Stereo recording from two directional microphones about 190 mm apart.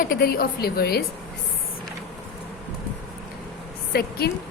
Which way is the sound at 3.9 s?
55° left (ahead or behind).